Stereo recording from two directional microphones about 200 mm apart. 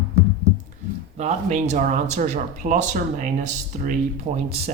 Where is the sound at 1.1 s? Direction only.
35° right (ahead or behind).